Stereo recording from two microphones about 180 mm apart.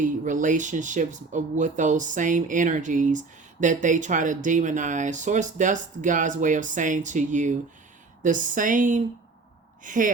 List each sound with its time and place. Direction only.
0.0 s speech: 45° right (ahead or behind)